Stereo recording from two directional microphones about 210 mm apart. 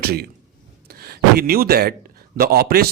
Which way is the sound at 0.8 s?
45° right (ahead or behind).